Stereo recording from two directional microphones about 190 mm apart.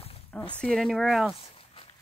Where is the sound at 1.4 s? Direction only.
30° left (ahead or behind).